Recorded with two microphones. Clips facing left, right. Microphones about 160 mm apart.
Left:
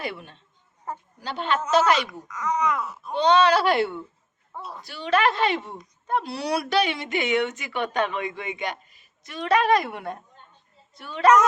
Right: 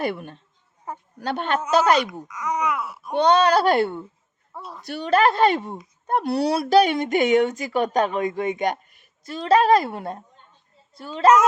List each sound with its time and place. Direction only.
0.0 s speech: 50° right (ahead or behind)
2.0 s speech: 10° right (ahead or behind)
3.2 s speech: 40° right (ahead or behind)
4.5 s a woman's voice: centre (ahead or behind)
4.9 s speech: 55° right (ahead or behind)
5.1 s speech: 40° right (ahead or behind)
6.4 s speech: 30° right (ahead or behind); by 9.0 s 50° right (ahead or behind)
9.2 s a woman's voice: 30° right (ahead or behind)